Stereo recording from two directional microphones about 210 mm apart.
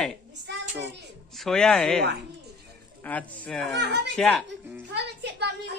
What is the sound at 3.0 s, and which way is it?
Speech, 5° left (ahead or behind).